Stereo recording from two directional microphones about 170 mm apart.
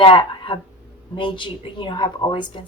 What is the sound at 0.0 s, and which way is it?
A woman's voice, 30° left (ahead or behind).